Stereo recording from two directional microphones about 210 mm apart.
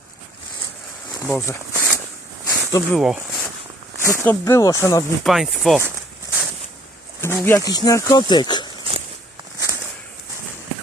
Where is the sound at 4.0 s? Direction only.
10° left (ahead or behind).